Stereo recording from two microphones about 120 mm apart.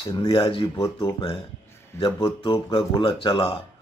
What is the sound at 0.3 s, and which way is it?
Speech, 45° left (ahead or behind).